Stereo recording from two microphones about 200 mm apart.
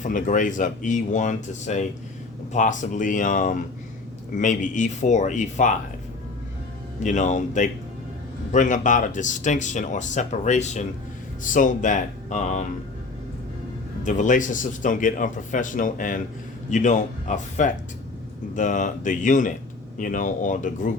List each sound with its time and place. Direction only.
0.0 s speech: 40° left (ahead or behind)
7.0 s speech: 40° left (ahead or behind)
14.0 s speech: 40° left (ahead or behind)